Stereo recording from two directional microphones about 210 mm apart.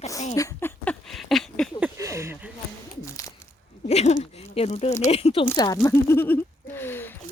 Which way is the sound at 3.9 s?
30° left (ahead or behind).